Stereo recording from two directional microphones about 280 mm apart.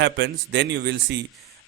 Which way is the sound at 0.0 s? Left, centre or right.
Right.